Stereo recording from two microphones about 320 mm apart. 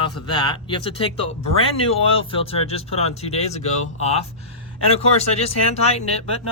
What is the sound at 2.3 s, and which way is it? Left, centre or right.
Speech, centre.